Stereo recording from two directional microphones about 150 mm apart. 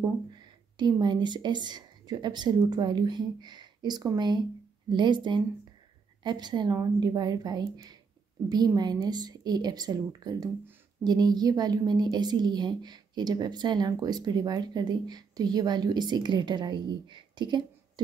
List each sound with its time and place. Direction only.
0.3 s a woman's voice: 30° right (ahead or behind)